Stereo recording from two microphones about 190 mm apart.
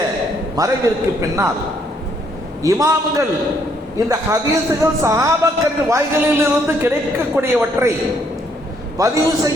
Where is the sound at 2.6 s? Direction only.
15° right (ahead or behind).